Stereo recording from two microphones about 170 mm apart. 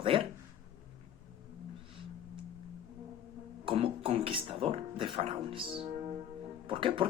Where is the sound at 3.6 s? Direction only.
30° right (ahead or behind).